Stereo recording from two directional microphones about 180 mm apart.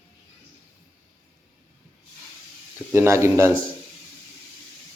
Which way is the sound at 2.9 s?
15° right (ahead or behind).